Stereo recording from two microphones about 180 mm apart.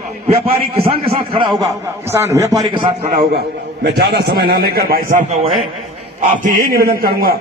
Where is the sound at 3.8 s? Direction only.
65° right (ahead or behind).